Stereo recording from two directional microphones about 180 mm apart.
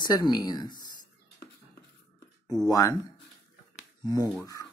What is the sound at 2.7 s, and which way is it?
Speech, 20° left (ahead or behind).